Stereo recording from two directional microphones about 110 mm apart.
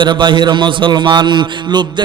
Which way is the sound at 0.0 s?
45° right (ahead or behind).